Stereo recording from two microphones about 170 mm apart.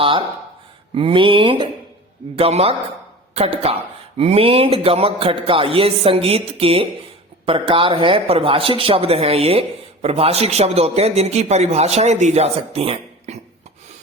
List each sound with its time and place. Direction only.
0.0 s speech: 30° right (ahead or behind)